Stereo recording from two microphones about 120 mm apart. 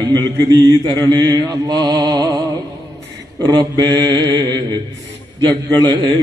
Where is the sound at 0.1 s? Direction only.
35° right (ahead or behind).